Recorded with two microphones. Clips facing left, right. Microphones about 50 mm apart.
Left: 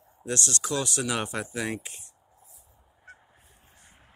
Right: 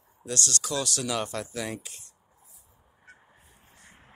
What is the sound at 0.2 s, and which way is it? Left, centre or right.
Speech, left.